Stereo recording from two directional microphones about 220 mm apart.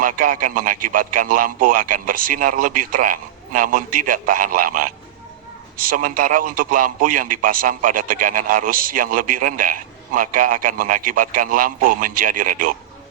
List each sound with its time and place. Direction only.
0.0 s a man's voice: 40° right (ahead or behind)